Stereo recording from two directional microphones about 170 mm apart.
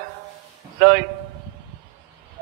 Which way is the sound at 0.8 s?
60° right (ahead or behind).